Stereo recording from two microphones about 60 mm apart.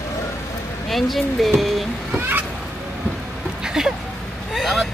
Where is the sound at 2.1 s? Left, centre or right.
Right.